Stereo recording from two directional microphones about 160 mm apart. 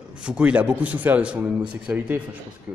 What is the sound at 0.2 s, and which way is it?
A man's voice, 5° right (ahead or behind).